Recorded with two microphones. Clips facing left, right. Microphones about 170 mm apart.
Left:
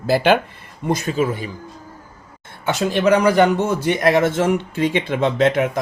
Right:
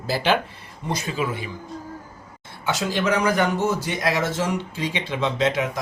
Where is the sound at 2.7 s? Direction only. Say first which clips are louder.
Left 6 dB; 60° left (ahead or behind).